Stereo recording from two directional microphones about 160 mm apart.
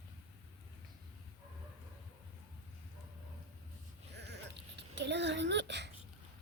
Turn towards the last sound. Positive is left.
turn(degrees=-90)